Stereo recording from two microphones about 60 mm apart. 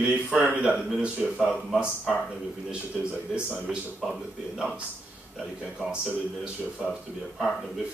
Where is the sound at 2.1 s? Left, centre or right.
Centre.